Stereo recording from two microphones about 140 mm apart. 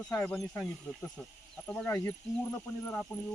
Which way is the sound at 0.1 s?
10° left (ahead or behind).